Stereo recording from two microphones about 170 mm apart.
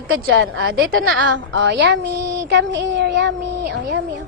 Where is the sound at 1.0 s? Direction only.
90° right.